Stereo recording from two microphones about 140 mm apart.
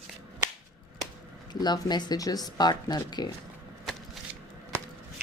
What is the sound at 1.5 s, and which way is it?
Speech, 30° left (ahead or behind).